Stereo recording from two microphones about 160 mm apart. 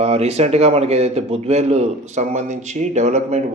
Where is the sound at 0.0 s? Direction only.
40° right (ahead or behind).